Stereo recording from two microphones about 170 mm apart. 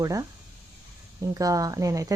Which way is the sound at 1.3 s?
20° right (ahead or behind).